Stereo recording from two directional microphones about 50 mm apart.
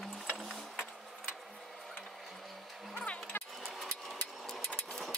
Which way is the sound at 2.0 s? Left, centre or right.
Centre.